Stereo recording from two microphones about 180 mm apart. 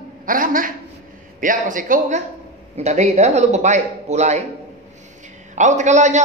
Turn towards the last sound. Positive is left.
turn(degrees=-40)  # may be behind; listen again after turning